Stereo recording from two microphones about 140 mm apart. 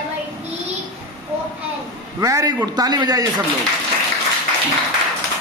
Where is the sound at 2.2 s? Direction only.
25° right (ahead or behind).